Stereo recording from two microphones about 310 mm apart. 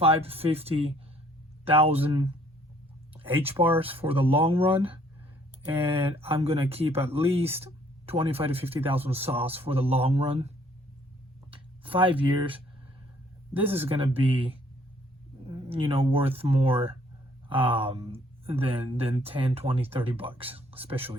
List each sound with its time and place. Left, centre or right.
0.0 s speech: centre
3.6 s speech: centre
11.5 s speech: centre